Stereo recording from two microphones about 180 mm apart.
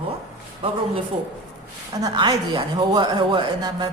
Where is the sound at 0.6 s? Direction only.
30° right (ahead or behind).